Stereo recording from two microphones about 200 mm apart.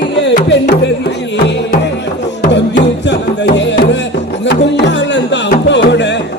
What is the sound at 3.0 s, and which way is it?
Music, 60° left (ahead or behind).